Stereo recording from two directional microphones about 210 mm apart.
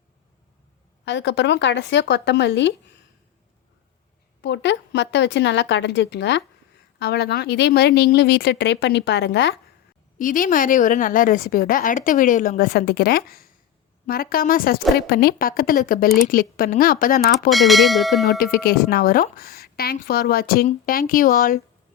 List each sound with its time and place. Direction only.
1.0 s speech: 55° left (ahead or behind)
4.4 s a woman's voice: 55° left (ahead or behind)
10.2 s a woman's voice: 40° left (ahead or behind)
17.5 s bell: centre (ahead or behind)
18.3 s a woman's voice: 45° left (ahead or behind)